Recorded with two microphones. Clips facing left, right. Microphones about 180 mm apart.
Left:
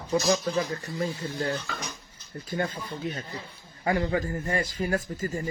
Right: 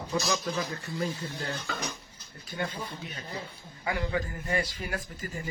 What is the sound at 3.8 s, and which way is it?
A man's voice, 45° left (ahead or behind).